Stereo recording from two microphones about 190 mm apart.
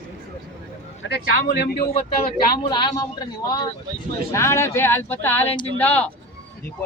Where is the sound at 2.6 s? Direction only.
25° left (ahead or behind).